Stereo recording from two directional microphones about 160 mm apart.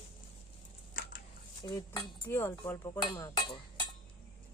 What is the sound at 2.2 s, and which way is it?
Speech, 10° left (ahead or behind).